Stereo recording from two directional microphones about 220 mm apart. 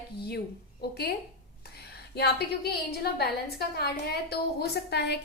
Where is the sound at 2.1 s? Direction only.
50° left (ahead or behind).